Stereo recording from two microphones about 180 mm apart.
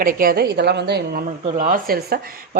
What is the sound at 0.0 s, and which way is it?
A woman's voice, 55° right (ahead or behind).